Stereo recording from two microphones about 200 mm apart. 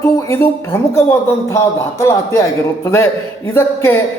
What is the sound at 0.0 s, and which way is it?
A man's voice, 10° left (ahead or behind).